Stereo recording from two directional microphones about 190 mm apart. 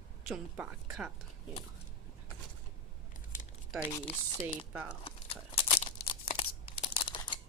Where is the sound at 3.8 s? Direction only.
10° left (ahead or behind).